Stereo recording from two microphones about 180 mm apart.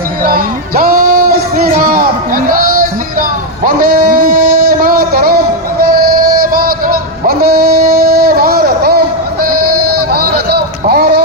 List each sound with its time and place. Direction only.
0.2 s music: 55° right (ahead or behind)